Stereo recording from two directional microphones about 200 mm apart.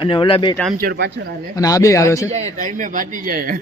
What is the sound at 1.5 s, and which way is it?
Speech, 15° left (ahead or behind).